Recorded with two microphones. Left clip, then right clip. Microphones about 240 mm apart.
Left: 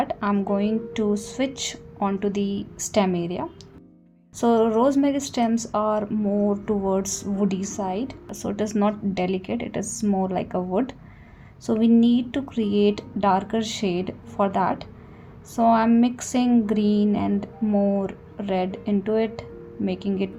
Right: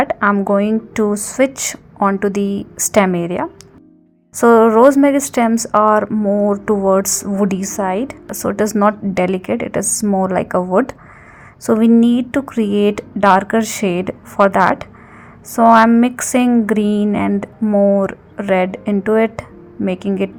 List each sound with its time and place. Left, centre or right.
0.0 s a woman's voice: right
2.4 s a woman's voice: right
2.8 s a woman's voice: right
10.0 s a woman's voice: centre
10.5 s a woman's voice: right